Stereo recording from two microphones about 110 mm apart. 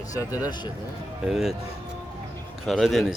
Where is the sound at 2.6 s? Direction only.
Centre (ahead or behind).